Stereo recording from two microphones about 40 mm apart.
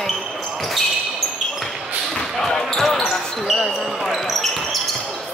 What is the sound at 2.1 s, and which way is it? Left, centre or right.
Basketball bounce, centre.